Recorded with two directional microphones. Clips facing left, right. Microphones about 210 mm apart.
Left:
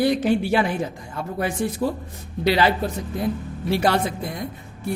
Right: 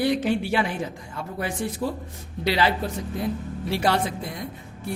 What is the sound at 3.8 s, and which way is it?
Speech, 45° left (ahead or behind).